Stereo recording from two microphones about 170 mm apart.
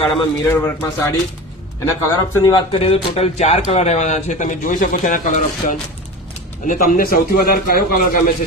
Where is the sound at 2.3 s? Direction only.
20° left (ahead or behind).